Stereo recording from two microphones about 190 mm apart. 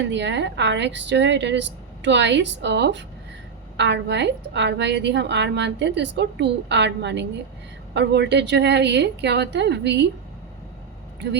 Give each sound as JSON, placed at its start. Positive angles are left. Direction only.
{"t": 0.0, "sound": "a woman's voice", "side_deg": -70}